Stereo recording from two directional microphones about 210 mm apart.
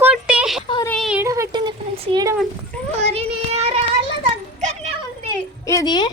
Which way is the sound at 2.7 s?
5° left (ahead or behind).